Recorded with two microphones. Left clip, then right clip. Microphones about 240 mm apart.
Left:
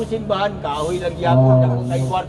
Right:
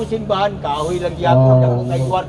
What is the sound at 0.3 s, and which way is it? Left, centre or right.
A man's voice, centre.